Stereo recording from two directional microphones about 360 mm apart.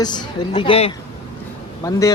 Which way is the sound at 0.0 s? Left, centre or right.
Centre.